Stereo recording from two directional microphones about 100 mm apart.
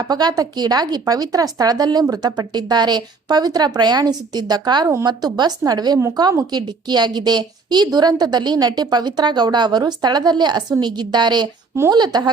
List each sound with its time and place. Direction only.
0.1 s a woman's voice: 40° right (ahead or behind)